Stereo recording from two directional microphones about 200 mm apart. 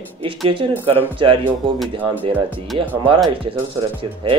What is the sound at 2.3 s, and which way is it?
Speech, 5° right (ahead or behind).